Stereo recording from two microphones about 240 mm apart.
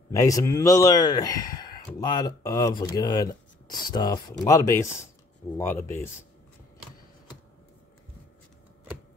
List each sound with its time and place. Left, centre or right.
0.1 s speech: centre